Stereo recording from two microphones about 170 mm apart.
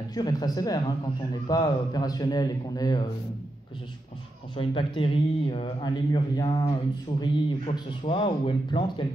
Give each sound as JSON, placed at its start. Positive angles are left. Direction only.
{"t": 0.1, "sound": "a man's voice", "side_deg": 25}
{"t": 4.6, "sound": "a man's voice", "side_deg": 30}